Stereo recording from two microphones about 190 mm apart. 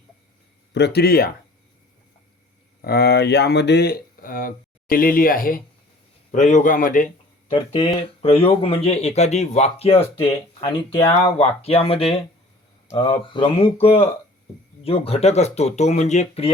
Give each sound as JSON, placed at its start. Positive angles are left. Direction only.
{"t": 0.7, "sound": "speech", "side_deg": 60}
{"t": 2.8, "sound": "speech", "side_deg": 55}
{"t": 7.5, "sound": "speech", "side_deg": 30}